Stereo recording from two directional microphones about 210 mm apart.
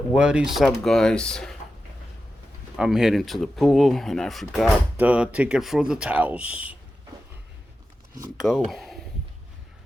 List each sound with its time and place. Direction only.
0.1 s speech: 5° right (ahead or behind)
2.7 s speech: centre (ahead or behind)
8.4 s speech: centre (ahead or behind)